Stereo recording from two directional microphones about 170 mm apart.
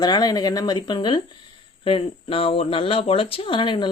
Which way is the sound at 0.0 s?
25° left (ahead or behind).